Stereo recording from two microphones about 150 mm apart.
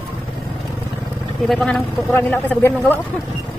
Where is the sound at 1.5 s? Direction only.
5° left (ahead or behind).